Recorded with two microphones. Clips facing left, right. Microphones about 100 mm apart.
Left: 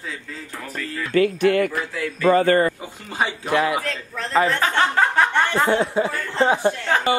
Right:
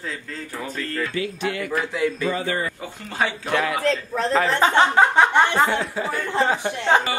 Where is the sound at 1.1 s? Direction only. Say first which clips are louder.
Left 9 dB; 55° left (ahead or behind).